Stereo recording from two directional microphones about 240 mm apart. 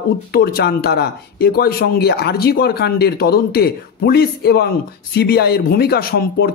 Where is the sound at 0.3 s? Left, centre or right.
Left.